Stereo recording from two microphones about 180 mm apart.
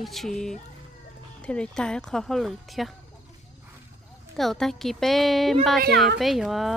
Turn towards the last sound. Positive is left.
turn(degrees=0)  # may be behind; listen again after turning